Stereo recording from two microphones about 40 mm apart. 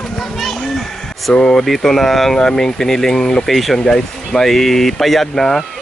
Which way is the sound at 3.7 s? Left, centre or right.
Centre.